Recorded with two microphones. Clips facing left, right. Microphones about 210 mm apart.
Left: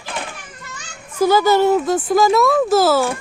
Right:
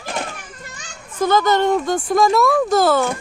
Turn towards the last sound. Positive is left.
turn(degrees=5)  # may be behind; listen again after turning